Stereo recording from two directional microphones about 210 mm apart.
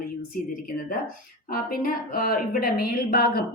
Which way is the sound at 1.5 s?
45° left (ahead or behind).